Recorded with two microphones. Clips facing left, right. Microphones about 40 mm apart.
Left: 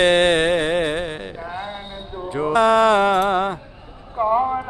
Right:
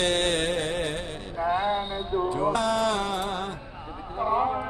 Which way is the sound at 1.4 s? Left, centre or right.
Centre.